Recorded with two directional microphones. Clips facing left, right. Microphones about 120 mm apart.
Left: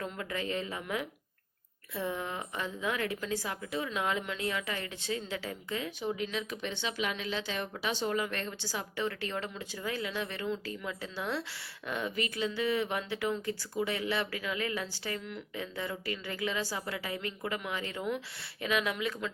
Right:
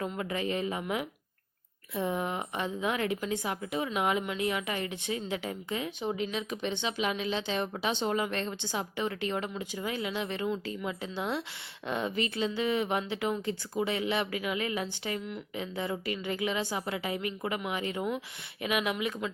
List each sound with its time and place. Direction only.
0.0 s a woman's voice: 20° right (ahead or behind)